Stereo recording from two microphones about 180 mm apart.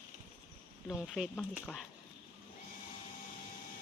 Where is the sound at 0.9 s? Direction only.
5° left (ahead or behind).